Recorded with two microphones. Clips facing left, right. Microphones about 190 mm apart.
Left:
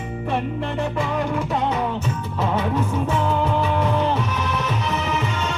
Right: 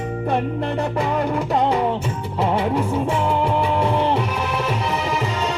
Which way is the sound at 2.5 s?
30° right (ahead or behind).